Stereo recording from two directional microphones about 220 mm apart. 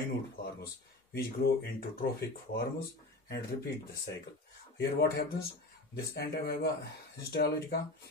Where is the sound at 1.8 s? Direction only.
45° left (ahead or behind).